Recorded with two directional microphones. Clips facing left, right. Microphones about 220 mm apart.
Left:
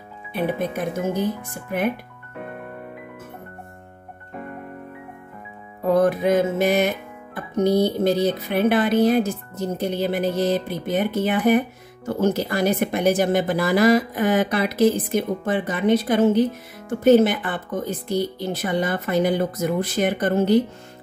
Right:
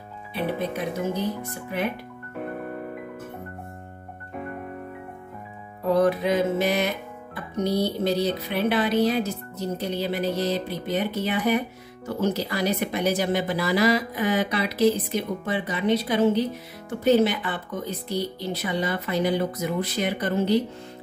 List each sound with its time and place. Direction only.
0.3 s speech: 50° left (ahead or behind)
5.9 s speech: 50° left (ahead or behind)